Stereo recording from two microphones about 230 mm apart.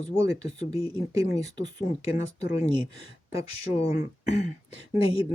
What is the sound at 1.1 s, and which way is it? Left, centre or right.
Speech, centre.